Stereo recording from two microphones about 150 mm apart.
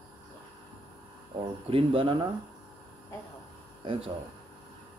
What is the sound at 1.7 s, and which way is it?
Speech, 40° right (ahead or behind).